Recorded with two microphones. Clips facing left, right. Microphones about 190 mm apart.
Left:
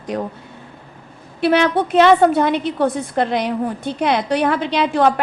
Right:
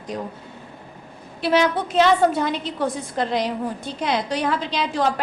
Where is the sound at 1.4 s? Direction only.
60° left (ahead or behind).